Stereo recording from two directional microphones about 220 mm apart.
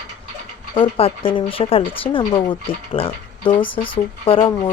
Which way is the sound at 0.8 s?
25° left (ahead or behind).